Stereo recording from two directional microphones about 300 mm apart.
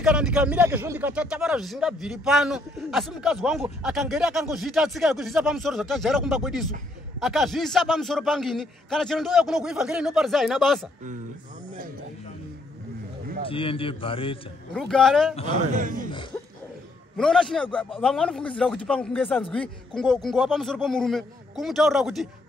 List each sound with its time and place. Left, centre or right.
0.0 s speech: centre
13.5 s a man's voice: centre
14.7 s speech: centre
15.7 s speech: right
16.1 s a man's voice: centre
17.2 s speech: centre